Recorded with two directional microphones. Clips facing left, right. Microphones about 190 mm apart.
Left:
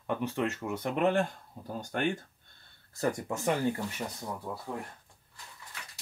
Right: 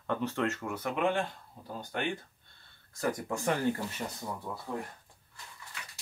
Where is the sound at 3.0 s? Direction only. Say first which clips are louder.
Left 1 dB; 20° left (ahead or behind).